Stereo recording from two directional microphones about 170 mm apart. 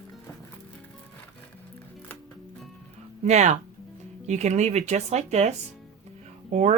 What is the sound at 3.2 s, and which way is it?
Speech, 45° right (ahead or behind).